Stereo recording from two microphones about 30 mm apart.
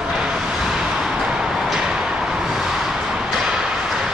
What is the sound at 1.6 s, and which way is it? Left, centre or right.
Vehicle, centre.